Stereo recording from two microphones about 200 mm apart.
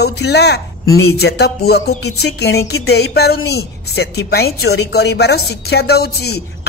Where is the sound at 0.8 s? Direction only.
90° left.